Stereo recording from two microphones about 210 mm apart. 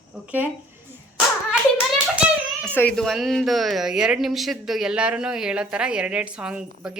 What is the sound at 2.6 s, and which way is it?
A woman's voice, 5° left (ahead or behind).